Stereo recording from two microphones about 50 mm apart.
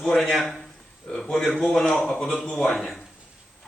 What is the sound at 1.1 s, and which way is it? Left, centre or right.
A man's voice, centre.